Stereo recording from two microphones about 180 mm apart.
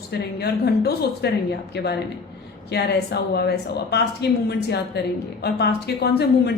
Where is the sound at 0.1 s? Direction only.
65° left (ahead or behind).